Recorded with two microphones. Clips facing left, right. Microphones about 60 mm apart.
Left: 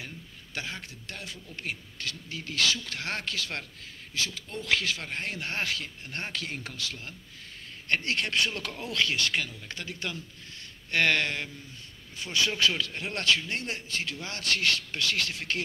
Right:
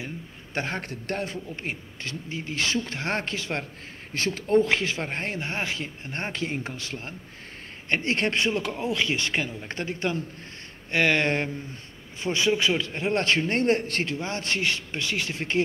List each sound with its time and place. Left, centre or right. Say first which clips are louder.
0.6 s a man's voice: right 8 dB; right
4.1 s a man's voice: right 13 dB; right
10.9 s a man's voice: right 3 dB; centre
11.2 s a man's voice: right 8 dB; right
14.0 s a man's voice: right 4 dB; right